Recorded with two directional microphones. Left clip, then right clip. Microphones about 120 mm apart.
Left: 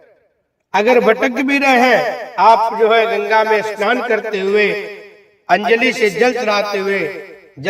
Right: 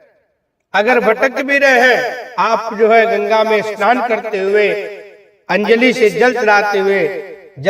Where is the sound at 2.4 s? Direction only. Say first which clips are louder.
Left 3 dB; 45° right (ahead or behind).